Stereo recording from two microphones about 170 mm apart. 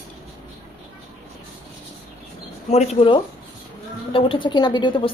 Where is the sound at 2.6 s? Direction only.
40° left (ahead or behind).